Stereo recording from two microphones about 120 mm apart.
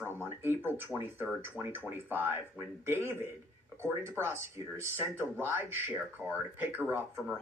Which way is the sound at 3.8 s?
25° right (ahead or behind).